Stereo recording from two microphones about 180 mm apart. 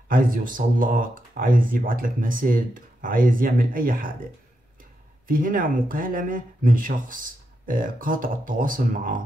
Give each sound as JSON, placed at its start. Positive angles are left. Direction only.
{"t": 0.1, "sound": "speech", "side_deg": -50}
{"t": 5.3, "sound": "speech", "side_deg": -50}